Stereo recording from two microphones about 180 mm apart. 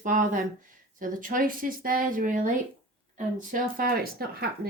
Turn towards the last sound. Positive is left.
turn(degrees=-55)  # may be behind; listen again after turning